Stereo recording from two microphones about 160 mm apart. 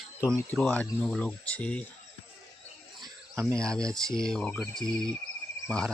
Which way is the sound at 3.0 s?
20° right (ahead or behind).